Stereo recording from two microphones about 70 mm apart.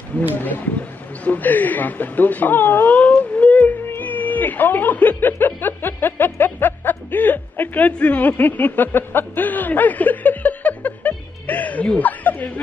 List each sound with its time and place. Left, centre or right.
1.2 s speech: left
12.0 s chuckle: left